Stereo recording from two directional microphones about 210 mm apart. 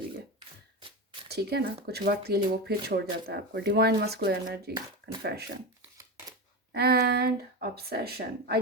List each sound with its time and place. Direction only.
1.3 s speech: 50° right (ahead or behind)
6.7 s speech: 50° right (ahead or behind)